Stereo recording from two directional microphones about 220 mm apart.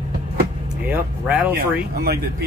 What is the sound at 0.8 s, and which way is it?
Speech, 5° right (ahead or behind).